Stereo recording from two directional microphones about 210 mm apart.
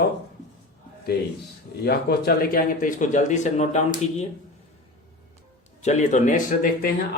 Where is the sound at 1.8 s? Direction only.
50° left (ahead or behind).